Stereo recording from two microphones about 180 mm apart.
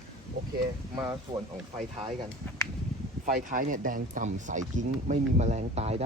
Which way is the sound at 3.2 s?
50° right (ahead or behind).